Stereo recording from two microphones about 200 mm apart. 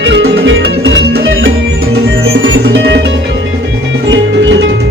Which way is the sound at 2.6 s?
65° right (ahead or behind).